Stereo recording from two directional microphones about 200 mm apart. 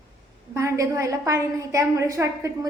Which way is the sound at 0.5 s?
15° right (ahead or behind).